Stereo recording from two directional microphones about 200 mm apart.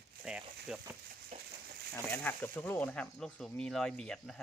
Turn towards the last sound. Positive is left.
turn(degrees=0)  # may be behind; listen again after turning